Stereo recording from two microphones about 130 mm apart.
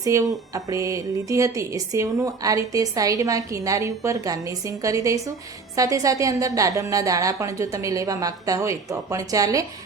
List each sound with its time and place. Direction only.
0.0 s a woman's voice: 25° right (ahead or behind)